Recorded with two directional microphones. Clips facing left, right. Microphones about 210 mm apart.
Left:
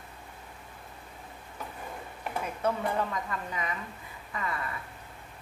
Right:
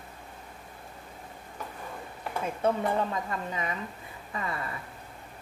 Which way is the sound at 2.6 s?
25° right (ahead or behind).